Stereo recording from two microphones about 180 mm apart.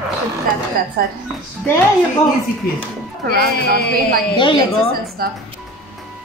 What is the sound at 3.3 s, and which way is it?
Speech, 55° right (ahead or behind).